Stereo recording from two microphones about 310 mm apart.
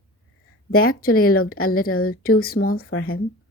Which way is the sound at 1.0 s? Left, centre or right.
Left.